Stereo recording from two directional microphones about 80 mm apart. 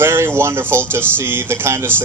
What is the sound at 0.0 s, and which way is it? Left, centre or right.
Speech, right.